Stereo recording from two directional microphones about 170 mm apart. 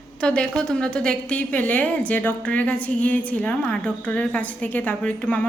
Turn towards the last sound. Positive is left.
turn(degrees=10)  # may be behind; listen again after turning